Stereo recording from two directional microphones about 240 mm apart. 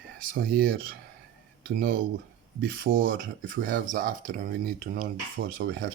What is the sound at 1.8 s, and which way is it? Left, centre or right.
Speech, right.